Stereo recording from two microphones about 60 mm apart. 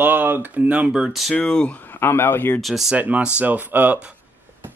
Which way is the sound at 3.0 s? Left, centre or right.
Right.